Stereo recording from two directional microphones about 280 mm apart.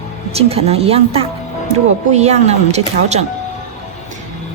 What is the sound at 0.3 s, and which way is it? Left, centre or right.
Speech, right.